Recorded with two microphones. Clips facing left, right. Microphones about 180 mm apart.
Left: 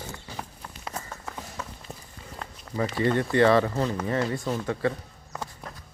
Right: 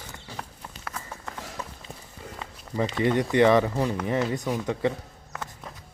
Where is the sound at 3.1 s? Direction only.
15° right (ahead or behind).